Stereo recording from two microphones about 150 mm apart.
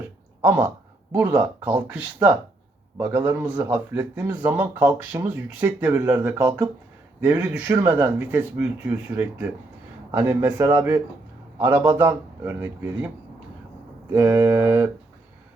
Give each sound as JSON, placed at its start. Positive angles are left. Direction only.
{"t": 0.4, "sound": "speech", "side_deg": -15}
{"t": 14.1, "sound": "speech", "side_deg": -20}